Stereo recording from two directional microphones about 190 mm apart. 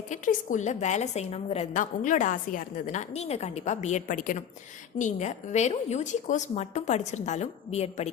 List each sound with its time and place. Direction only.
0.1 s a woman's voice: 40° left (ahead or behind)